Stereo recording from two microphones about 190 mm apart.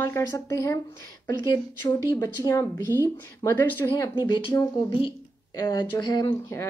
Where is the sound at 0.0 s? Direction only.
15° left (ahead or behind).